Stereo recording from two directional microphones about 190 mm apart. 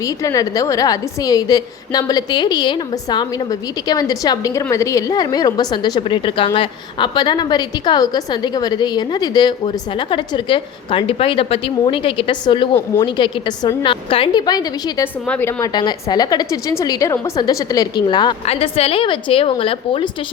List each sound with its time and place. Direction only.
0.0 s a woman's voice: 15° left (ahead or behind)